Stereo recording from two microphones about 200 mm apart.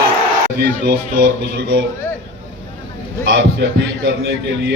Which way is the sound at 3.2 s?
70° right (ahead or behind).